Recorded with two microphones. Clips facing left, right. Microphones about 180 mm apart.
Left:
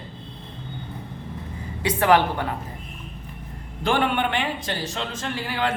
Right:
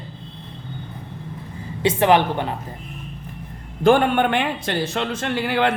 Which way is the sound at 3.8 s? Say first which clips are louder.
Right 7 dB; 45° right (ahead or behind).